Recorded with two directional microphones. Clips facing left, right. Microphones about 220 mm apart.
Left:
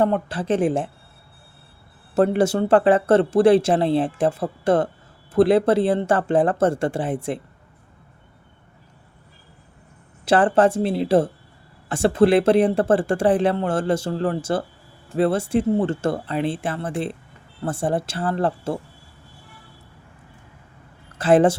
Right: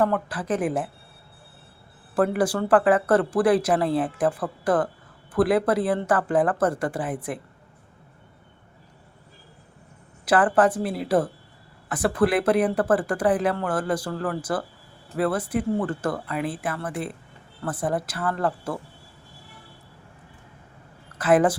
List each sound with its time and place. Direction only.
0.0 s speech: 25° left (ahead or behind)
2.1 s speech: 25° left (ahead or behind)
10.2 s speech: 25° left (ahead or behind)
21.2 s speech: 30° left (ahead or behind)